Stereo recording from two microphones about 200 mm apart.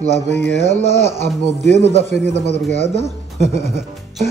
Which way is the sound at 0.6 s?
35° right (ahead or behind).